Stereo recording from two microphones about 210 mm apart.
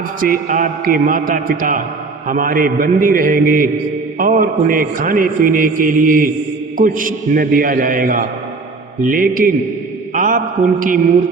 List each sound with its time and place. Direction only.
0.2 s a man's voice: 40° right (ahead or behind)